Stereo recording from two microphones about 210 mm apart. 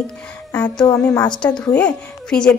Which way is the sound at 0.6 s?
20° left (ahead or behind).